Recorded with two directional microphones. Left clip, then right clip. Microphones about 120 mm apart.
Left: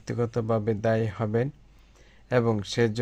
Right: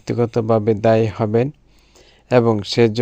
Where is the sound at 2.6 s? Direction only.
40° right (ahead or behind).